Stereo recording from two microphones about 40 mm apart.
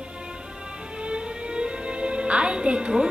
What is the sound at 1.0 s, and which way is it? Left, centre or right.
A woman's voice, right.